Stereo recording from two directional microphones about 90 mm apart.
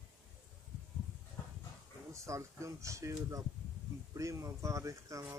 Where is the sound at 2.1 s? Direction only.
35° right (ahead or behind).